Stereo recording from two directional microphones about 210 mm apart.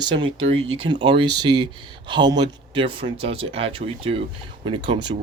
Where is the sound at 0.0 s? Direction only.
20° right (ahead or behind).